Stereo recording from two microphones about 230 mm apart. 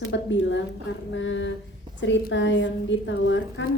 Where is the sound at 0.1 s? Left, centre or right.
Left.